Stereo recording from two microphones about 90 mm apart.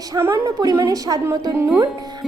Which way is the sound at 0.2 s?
30° right (ahead or behind).